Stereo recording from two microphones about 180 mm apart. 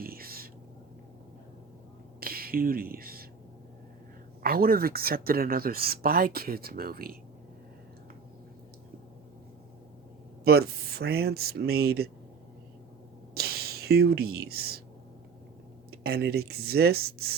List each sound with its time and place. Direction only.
0.0 s a sound: 55° right (ahead or behind)
2.2 s speech: 55° right (ahead or behind)
4.4 s speech: 55° right (ahead or behind)
10.4 s speech: 60° right (ahead or behind)
13.3 s speech: 60° right (ahead or behind)
15.9 s speech: 60° right (ahead or behind)